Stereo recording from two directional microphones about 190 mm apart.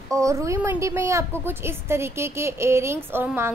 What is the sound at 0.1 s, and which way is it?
A woman's voice, 15° right (ahead or behind).